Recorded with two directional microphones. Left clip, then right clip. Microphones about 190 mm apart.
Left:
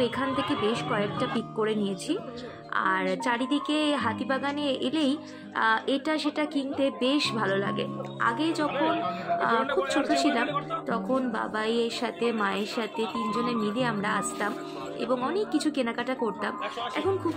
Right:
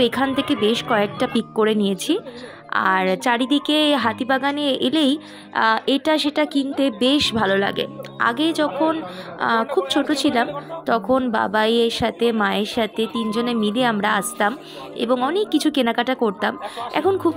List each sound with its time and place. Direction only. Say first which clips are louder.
0.0 s a woman's voice: right 8 dB; 50° right (ahead or behind)